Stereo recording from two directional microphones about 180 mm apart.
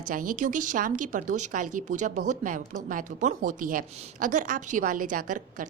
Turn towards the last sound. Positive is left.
turn(degrees=-45)  # may be behind; listen again after turning